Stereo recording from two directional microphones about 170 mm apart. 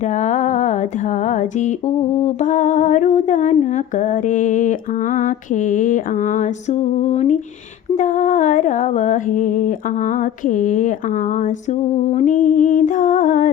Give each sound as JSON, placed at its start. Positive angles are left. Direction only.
{"t": 0.1, "sound": "a sound", "side_deg": 45}
{"t": 2.2, "sound": "humming", "side_deg": 45}
{"t": 12.1, "sound": "humming", "side_deg": 45}